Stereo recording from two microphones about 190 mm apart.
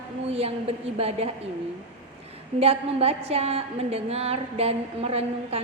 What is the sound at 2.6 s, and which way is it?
A woman's voice, 30° right (ahead or behind).